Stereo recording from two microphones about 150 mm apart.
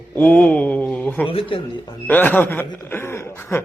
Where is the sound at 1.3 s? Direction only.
35° left (ahead or behind).